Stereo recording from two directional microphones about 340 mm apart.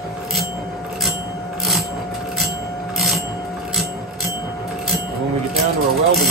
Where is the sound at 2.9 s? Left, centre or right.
Centre.